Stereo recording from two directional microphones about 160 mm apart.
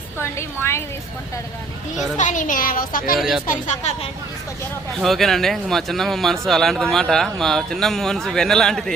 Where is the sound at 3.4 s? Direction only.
55° left (ahead or behind).